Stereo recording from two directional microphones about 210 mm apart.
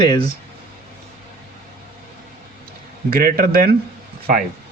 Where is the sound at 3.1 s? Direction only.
45° right (ahead or behind).